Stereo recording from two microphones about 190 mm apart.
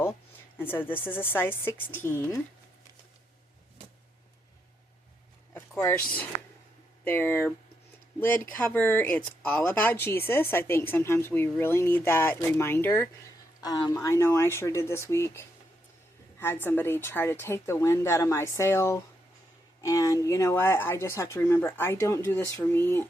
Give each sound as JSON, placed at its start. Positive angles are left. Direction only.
{"t": 0.6, "sound": "speech", "side_deg": 10}
{"t": 5.5, "sound": "a sound", "side_deg": 10}
{"t": 7.0, "sound": "speech", "side_deg": 10}